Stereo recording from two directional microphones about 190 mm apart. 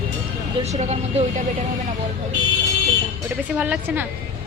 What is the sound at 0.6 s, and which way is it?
Speech, 35° right (ahead or behind).